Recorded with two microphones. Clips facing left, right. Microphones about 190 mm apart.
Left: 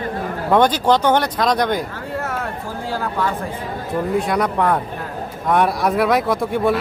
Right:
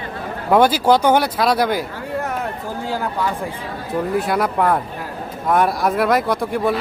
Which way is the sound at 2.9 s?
15° right (ahead or behind).